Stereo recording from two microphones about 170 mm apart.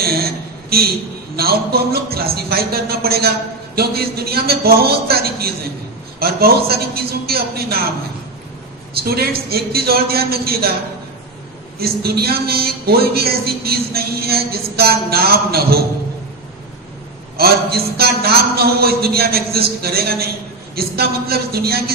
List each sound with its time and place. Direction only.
0.0 s a sound: 65° right (ahead or behind)
1.4 s speech: 65° right (ahead or behind)
9.0 s speech: 65° right (ahead or behind)
11.8 s speech: 65° right (ahead or behind)
17.3 s speech: 65° right (ahead or behind)